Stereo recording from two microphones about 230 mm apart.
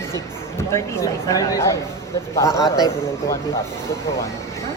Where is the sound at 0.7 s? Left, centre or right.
Centre.